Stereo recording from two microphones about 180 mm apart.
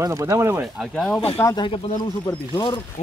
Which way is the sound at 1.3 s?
20° left (ahead or behind).